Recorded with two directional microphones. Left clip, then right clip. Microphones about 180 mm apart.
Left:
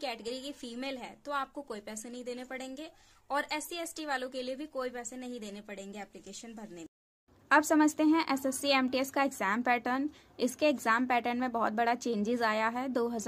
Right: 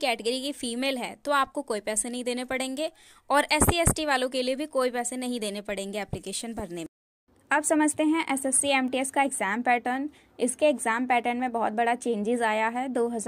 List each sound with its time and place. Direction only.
0.0 s a woman's voice: 45° right (ahead or behind)
7.4 s a woman's voice: 15° right (ahead or behind)